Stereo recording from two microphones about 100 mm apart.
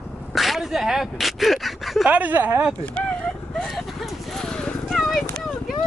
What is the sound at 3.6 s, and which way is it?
Clip-clop, 5° left (ahead or behind).